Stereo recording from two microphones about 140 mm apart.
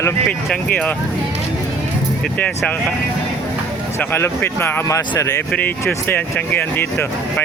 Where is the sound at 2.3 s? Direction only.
10° left (ahead or behind).